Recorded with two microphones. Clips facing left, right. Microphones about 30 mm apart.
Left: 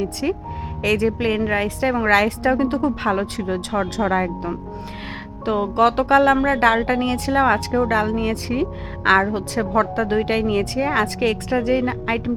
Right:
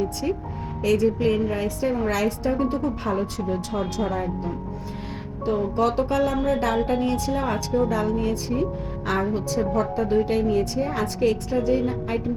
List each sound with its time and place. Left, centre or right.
0.0 s a woman's voice: left